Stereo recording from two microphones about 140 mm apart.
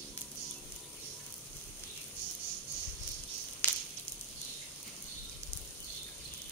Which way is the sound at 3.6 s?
15° left (ahead or behind).